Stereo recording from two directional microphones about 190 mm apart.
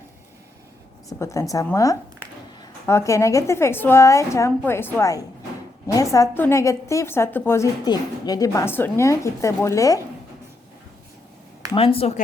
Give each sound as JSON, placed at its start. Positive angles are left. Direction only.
{"t": 1.2, "sound": "a woman's voice", "side_deg": 15}
{"t": 11.7, "sound": "speech", "side_deg": 30}